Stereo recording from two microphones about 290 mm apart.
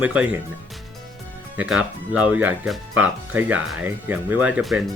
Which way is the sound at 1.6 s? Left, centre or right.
Centre.